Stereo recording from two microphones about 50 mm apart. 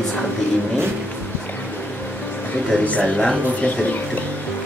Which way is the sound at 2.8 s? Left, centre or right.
Left.